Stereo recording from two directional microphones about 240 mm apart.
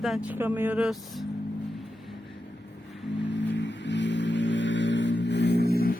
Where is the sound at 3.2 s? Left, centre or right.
Left.